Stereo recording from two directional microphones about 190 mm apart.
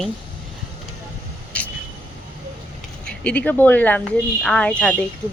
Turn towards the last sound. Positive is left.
turn(degrees=5)  # may be behind; listen again after turning